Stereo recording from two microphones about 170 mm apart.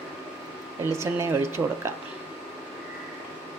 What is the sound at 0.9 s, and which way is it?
Speech, 15° right (ahead or behind).